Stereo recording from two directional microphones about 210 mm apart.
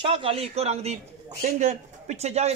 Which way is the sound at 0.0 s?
25° right (ahead or behind).